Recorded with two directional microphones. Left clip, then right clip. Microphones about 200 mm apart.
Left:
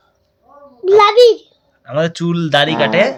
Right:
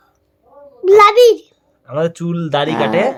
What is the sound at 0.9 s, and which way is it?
A child's voice, 20° right (ahead or behind).